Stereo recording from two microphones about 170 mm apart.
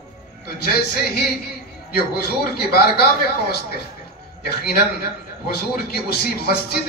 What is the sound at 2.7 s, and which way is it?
Speech, 65° left (ahead or behind).